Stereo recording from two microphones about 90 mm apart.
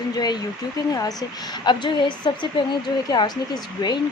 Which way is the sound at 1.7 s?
60° left (ahead or behind).